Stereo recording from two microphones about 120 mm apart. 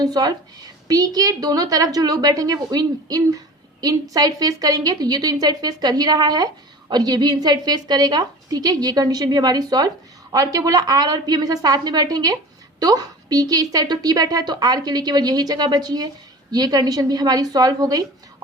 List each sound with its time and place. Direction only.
0.0 s a woman's voice: 35° right (ahead or behind)